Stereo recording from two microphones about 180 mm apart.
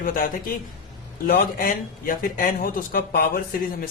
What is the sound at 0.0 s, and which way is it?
Speech, 50° left (ahead or behind).